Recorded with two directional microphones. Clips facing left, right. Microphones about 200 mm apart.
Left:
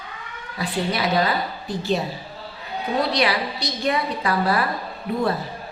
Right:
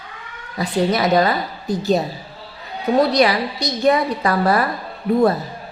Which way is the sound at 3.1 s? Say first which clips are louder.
Right 6 dB; 45° right (ahead or behind).